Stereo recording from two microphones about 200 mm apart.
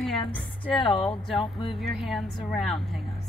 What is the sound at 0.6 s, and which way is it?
Speech, 25° left (ahead or behind).